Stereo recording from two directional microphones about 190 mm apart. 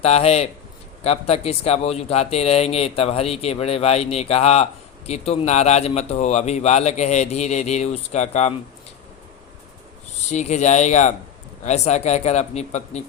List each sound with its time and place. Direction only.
0.0 s speech: 35° left (ahead or behind)
10.2 s speech: 35° left (ahead or behind)